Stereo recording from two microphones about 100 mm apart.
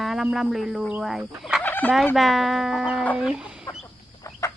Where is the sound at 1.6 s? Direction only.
15° left (ahead or behind).